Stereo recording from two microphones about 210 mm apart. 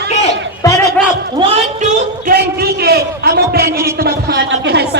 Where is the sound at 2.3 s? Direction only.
50° right (ahead or behind).